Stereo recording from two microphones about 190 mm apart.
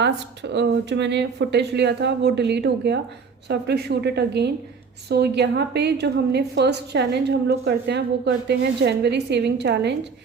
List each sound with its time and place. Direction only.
0.5 s a woman's voice: 65° right (ahead or behind)